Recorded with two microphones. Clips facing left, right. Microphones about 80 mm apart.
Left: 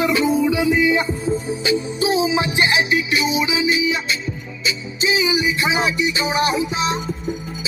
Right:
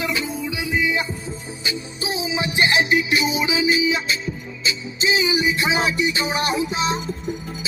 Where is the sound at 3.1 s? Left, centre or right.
Centre.